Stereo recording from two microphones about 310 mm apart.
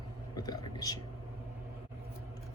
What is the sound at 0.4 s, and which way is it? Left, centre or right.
Speech, centre.